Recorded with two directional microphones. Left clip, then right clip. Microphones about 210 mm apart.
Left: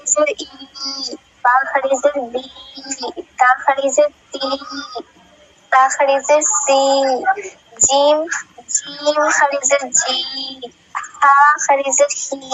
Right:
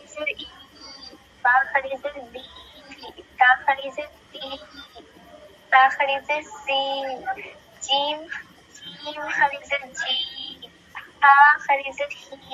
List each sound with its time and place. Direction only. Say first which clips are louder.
0.2 s speech: left 11 dB; 50° left (ahead or behind)
1.4 s a woman's voice: left 5 dB; 35° left (ahead or behind)
3.0 s a sound: left 4 dB; 50° left (ahead or behind)
5.7 s speech: left 5 dB; 45° left (ahead or behind)
7.1 s a child's voice: left 13 dB; 40° left (ahead or behind)
12.3 s speech: left 15 dB; 55° left (ahead or behind)